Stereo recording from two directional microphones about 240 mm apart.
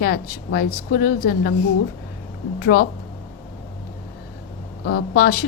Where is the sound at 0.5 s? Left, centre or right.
Left.